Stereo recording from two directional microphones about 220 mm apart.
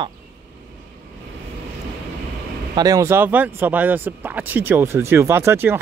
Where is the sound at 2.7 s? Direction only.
15° right (ahead or behind).